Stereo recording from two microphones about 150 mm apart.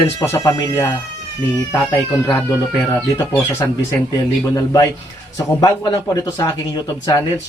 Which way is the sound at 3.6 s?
25° left (ahead or behind).